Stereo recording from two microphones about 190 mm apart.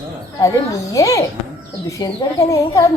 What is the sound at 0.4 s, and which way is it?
Speech, 15° left (ahead or behind).